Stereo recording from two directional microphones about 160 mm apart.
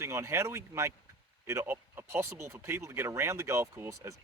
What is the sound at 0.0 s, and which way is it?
Speech, 15° right (ahead or behind).